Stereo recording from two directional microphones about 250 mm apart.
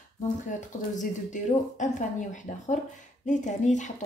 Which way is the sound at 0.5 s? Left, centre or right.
Left.